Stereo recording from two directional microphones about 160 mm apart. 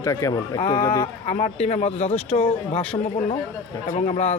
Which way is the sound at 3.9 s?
45° left (ahead or behind).